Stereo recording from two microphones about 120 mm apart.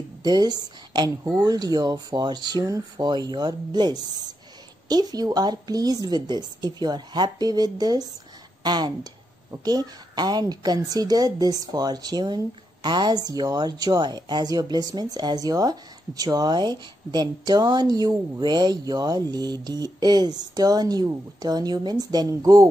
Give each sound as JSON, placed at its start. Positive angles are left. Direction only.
{"t": 0.2, "sound": "a woman's voice", "side_deg": -35}